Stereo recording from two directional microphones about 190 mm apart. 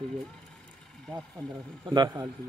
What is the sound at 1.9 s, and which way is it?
Speech, 20° right (ahead or behind).